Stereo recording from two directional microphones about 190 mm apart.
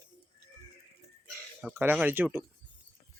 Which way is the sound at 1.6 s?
5° right (ahead or behind).